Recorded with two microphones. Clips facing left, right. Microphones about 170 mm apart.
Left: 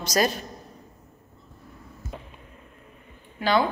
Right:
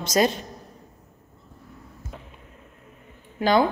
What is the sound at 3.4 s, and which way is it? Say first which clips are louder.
Speech: right 3 dB; 45° right (ahead or behind).